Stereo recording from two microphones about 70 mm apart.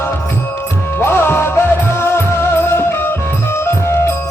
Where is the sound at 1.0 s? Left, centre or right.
Left.